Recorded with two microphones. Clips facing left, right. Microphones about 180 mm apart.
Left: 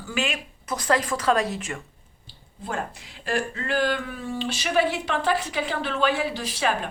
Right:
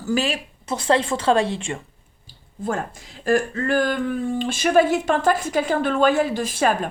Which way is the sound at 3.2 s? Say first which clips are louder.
Right 7 dB; 45° right (ahead or behind).